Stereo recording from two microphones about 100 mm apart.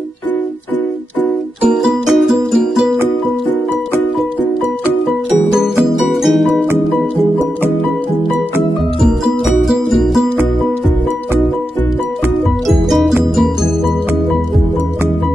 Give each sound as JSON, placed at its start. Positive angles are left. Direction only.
{"t": 1.7, "sound": "music", "side_deg": 0}
{"t": 5.0, "sound": "music", "side_deg": -5}
{"t": 9.0, "sound": "music", "side_deg": 0}